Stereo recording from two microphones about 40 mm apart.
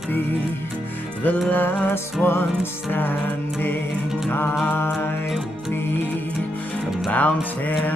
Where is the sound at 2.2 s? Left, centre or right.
Left.